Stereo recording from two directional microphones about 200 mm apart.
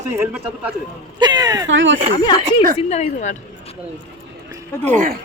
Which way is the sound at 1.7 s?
70° right (ahead or behind).